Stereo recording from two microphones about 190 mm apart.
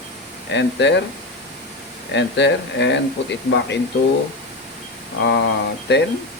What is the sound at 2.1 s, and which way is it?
Speech, 65° left (ahead or behind).